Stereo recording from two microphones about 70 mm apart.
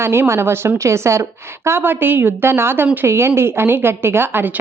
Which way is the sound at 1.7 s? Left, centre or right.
Right.